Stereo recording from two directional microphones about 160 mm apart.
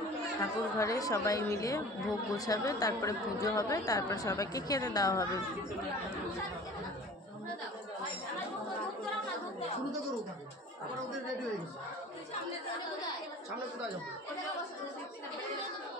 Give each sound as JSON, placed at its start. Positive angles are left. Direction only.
{"t": 0.4, "sound": "a woman's voice", "side_deg": 20}